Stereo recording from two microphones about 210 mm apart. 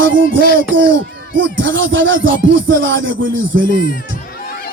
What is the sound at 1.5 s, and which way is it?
Speech, 65° right (ahead or behind).